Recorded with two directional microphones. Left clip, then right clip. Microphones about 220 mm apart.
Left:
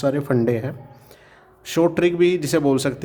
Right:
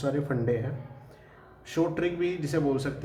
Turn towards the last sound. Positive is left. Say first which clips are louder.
# left 9 dB
turn(degrees=50)  # may be behind; listen again after turning